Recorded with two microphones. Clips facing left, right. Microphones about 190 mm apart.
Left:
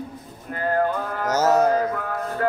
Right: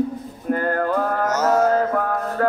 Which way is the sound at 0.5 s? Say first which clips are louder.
Right 1 dB; 50° right (ahead or behind).